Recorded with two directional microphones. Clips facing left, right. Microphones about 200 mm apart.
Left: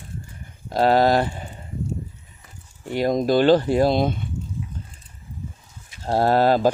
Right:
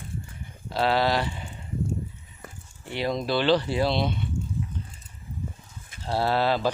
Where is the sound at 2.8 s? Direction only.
45° left (ahead or behind).